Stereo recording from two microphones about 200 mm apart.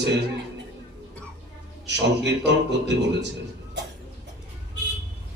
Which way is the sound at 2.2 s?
60° right (ahead or behind).